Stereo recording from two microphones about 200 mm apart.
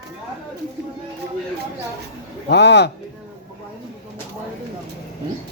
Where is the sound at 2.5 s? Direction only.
60° left (ahead or behind).